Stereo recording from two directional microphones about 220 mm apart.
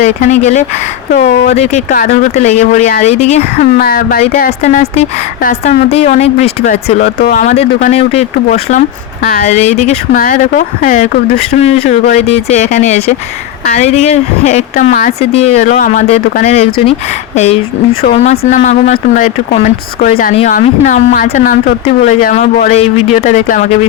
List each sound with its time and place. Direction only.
0.0 s speech: 30° left (ahead or behind)
3.8 s speech: 40° left (ahead or behind)
7.0 s speech: 45° left (ahead or behind)
20.3 s speech: 30° left (ahead or behind)